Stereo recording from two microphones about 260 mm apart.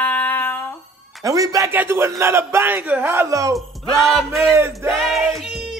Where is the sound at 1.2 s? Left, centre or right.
Centre.